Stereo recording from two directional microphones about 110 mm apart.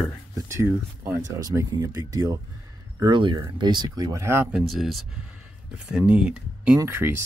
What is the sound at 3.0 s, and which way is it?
Speech, 45° right (ahead or behind).